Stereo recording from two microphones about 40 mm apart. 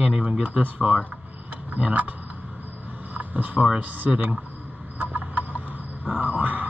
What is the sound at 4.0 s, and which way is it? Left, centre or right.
Speech, right.